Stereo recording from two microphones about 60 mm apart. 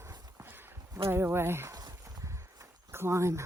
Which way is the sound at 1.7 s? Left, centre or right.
Right.